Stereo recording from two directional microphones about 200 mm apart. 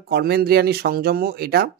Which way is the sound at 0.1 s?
50° right (ahead or behind).